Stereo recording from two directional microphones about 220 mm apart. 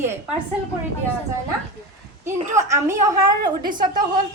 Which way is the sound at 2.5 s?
15° right (ahead or behind).